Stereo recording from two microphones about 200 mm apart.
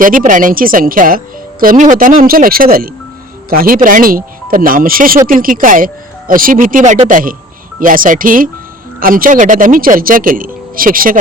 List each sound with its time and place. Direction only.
0.0 s speech: 40° right (ahead or behind)